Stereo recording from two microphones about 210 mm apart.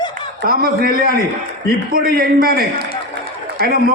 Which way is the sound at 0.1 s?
45° right (ahead or behind).